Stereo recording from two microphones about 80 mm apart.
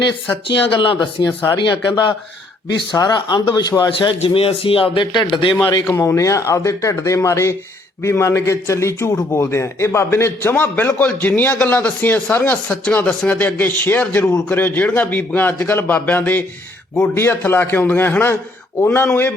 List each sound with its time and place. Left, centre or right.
0.4 s speech: left
1.5 s a man's voice: left
5.9 s a man's voice: left